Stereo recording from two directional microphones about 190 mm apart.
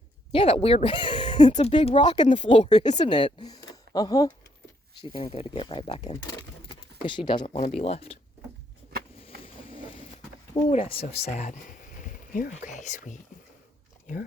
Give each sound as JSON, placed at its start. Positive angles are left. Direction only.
{"t": 0.3, "sound": "speech", "side_deg": 30}
{"t": 3.0, "sound": "speech", "side_deg": 25}
{"t": 4.9, "sound": "speech", "side_deg": 30}
{"t": 6.7, "sound": "a sound", "side_deg": 25}
{"t": 7.8, "sound": "speech", "side_deg": 35}
{"t": 9.2, "sound": "vehicle", "side_deg": 30}
{"t": 10.7, "sound": "speech", "side_deg": 30}